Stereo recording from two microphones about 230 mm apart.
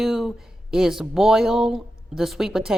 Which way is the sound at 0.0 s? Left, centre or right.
Centre.